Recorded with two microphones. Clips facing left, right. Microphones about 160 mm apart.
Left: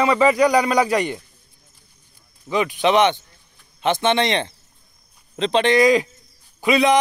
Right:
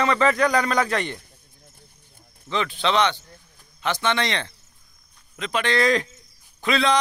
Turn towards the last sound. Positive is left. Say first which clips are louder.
# left 5 dB
turn(degrees=15)  # may be behind; listen again after turning